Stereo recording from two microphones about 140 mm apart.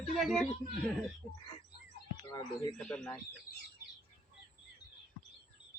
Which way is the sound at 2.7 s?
5° left (ahead or behind).